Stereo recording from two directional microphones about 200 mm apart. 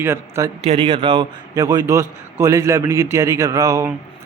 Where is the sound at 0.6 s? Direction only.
30° right (ahead or behind).